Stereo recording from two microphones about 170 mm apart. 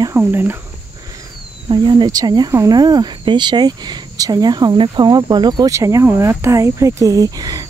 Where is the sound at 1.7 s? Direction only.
25° right (ahead or behind).